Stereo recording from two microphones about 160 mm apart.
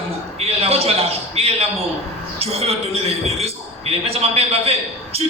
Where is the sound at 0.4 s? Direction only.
40° right (ahead or behind).